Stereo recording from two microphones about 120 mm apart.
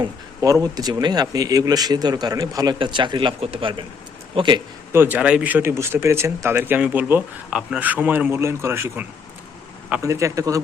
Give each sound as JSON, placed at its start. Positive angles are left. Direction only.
{"t": 0.0, "sound": "speech", "side_deg": -30}
{"t": 2.7, "sound": "speech", "side_deg": -45}
{"t": 4.9, "sound": "speech", "side_deg": -15}